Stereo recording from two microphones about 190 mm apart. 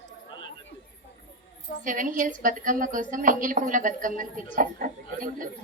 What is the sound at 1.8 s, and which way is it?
Speech, 45° right (ahead or behind).